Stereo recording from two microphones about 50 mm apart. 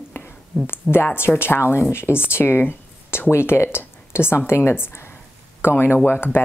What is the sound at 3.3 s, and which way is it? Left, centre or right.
A woman's voice, left.